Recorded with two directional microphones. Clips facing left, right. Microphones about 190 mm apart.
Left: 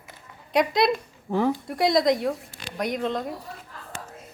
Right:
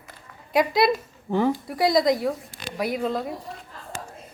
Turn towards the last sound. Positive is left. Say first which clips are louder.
# right 1 dB
turn(degrees=-5)  # may be behind; listen again after turning